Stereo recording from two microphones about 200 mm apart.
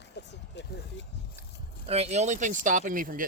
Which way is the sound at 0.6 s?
60° left (ahead or behind).